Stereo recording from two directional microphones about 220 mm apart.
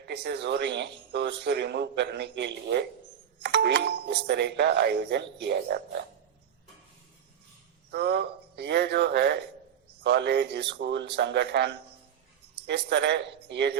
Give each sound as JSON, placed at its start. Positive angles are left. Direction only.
{"t": 0.0, "sound": "speech", "side_deg": -50}
{"t": 7.9, "sound": "speech", "side_deg": -50}